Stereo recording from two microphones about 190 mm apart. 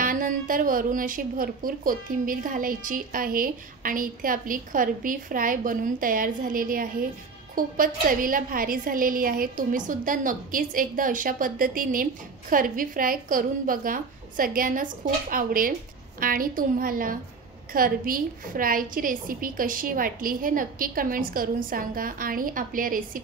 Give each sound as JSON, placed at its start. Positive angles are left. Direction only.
{"t": 0.0, "sound": "a woman's voice", "side_deg": -45}